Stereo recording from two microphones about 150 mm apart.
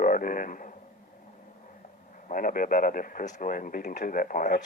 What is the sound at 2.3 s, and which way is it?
A man's voice, 65° left (ahead or behind).